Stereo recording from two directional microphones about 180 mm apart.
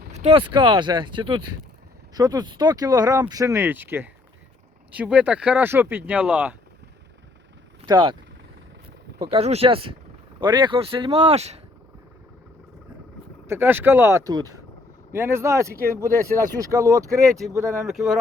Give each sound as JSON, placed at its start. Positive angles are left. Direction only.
{"t": 0.1, "sound": "speech", "side_deg": -35}
{"t": 7.9, "sound": "speech", "side_deg": -25}
{"t": 9.2, "sound": "speech", "side_deg": -35}
{"t": 13.5, "sound": "speech", "side_deg": -10}
{"t": 17.8, "sound": "speech", "side_deg": 0}